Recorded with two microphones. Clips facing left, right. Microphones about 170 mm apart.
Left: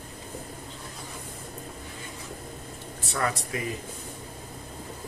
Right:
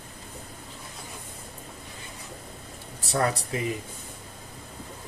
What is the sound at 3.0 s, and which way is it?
Speech, 35° right (ahead or behind).